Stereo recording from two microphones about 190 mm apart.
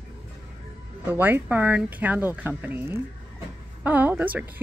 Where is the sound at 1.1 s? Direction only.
10° right (ahead or behind).